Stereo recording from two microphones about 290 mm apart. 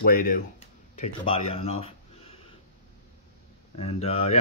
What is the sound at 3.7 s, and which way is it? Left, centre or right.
Speech, left.